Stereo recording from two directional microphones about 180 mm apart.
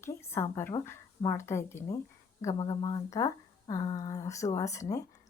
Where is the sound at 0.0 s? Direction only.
15° left (ahead or behind).